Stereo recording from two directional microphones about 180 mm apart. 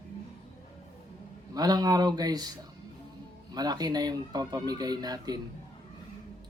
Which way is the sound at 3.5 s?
20° right (ahead or behind).